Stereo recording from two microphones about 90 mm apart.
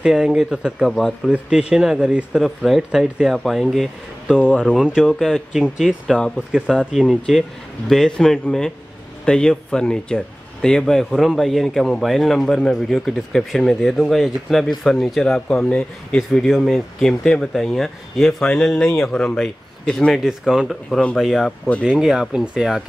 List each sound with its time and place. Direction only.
0.0 s speech: 5° right (ahead or behind)
1.3 s speech: 10° right (ahead or behind)
4.4 s speech: 15° left (ahead or behind)
4.7 s speech: 5° right (ahead or behind)
6.1 s speech: 10° left (ahead or behind)
6.5 s speech: 10° right (ahead or behind); by 16.2 s 10° left (ahead or behind)
16.2 s speech: centre (ahead or behind)
17.2 s speech: 10° left (ahead or behind)
20.2 s speech: 5° right (ahead or behind)